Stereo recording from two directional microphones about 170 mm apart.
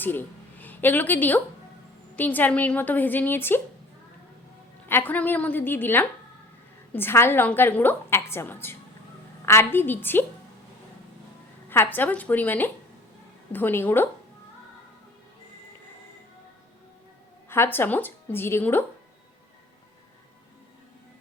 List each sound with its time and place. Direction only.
0.0 s a woman's voice: 10° left (ahead or behind)
4.9 s a woman's voice: 10° left (ahead or behind)
11.7 s a woman's voice: 10° left (ahead or behind)
17.5 s a woman's voice: 15° left (ahead or behind)